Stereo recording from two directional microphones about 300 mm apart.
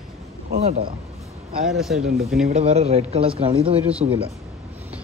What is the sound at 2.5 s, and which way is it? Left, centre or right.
Speech, right.